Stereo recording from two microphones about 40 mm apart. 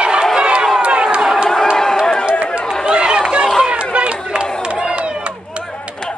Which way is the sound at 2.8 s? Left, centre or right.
Right.